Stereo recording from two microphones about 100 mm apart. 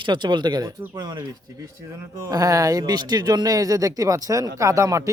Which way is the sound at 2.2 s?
35° right (ahead or behind).